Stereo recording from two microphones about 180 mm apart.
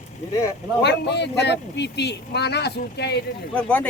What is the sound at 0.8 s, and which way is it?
Speech, 70° left (ahead or behind).